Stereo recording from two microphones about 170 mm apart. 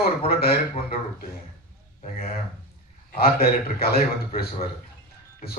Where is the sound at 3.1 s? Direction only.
60° left (ahead or behind).